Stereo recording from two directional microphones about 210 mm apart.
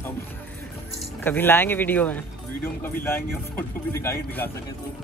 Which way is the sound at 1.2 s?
10° left (ahead or behind).